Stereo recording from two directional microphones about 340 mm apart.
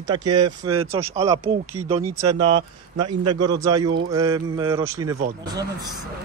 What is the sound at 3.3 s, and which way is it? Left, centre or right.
Speech, centre.